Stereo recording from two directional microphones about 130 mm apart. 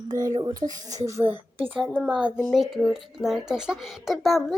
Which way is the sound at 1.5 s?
45° right (ahead or behind).